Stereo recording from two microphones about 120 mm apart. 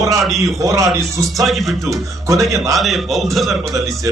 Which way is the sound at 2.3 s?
25° right (ahead or behind).